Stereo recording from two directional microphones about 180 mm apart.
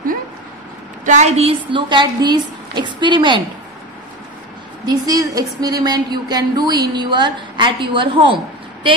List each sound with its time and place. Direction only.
1.0 s a woman's voice: 40° right (ahead or behind)
4.8 s a woman's voice: 20° right (ahead or behind)